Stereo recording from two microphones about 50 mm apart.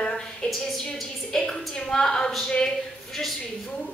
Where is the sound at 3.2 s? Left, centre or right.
Centre.